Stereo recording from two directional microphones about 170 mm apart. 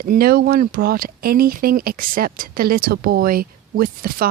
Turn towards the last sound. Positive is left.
turn(degrees=-60)  # may be behind; listen again after turning